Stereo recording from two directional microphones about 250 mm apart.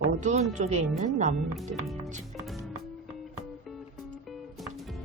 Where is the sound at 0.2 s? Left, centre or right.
Right.